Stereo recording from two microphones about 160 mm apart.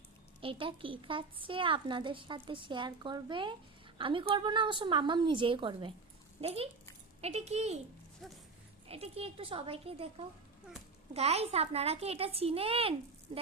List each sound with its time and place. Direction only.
0.4 s a woman's voice: 35° right (ahead or behind)
8.2 s speech: centre (ahead or behind)
8.9 s a woman's voice: 40° right (ahead or behind)
13.3 s a sound: 35° right (ahead or behind)